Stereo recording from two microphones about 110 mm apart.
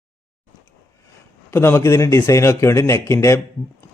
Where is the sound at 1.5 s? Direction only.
20° left (ahead or behind).